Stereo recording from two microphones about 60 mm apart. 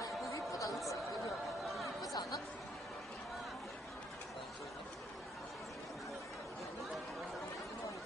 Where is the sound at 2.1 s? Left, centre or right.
Left.